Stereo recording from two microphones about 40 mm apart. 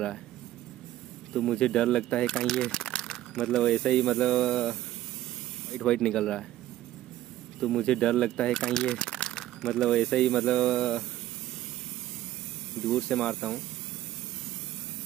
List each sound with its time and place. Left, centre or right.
1.3 s speech: centre
7.8 s speech: centre
12.7 s speech: centre